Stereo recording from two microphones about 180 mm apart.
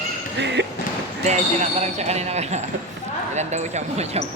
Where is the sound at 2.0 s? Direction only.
35° right (ahead or behind).